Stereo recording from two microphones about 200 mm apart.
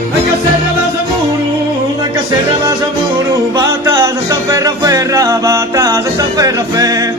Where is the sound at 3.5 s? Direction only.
15° right (ahead or behind).